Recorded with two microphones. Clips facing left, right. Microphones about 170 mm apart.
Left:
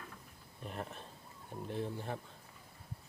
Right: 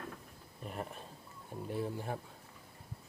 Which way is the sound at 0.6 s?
Centre (ahead or behind).